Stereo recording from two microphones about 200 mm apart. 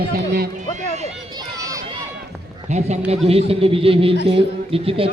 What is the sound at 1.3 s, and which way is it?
Run, 20° right (ahead or behind).